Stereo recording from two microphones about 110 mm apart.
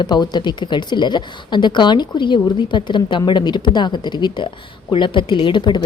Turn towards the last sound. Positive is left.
turn(degrees=45)  # may be behind; listen again after turning